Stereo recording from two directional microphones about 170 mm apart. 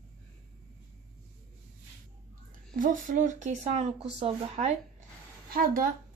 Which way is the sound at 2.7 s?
50° right (ahead or behind).